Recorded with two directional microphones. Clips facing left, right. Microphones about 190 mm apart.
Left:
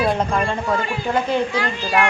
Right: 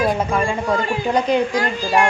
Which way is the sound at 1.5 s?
40° right (ahead or behind).